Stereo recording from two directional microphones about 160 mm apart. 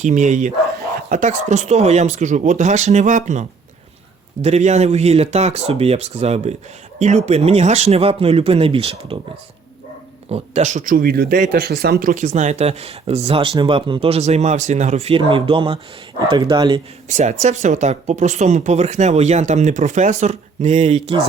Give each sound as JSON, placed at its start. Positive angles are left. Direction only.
{"t": 0.0, "sound": "speech", "side_deg": -50}
{"t": 4.4, "sound": "speech", "side_deg": -45}
{"t": 10.2, "sound": "speech", "side_deg": -40}
{"t": 10.9, "sound": "speech", "side_deg": -75}
{"t": 17.1, "sound": "speech", "side_deg": -45}